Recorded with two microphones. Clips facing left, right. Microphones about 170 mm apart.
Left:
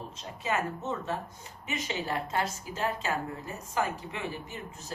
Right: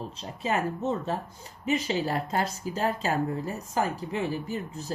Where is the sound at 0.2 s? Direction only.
35° right (ahead or behind).